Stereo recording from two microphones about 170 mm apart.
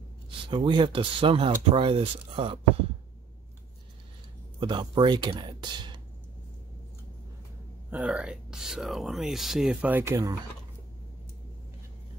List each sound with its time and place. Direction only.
0.5 s speech: 30° right (ahead or behind)
4.6 s speech: 25° right (ahead or behind)
7.9 s speech: 5° right (ahead or behind)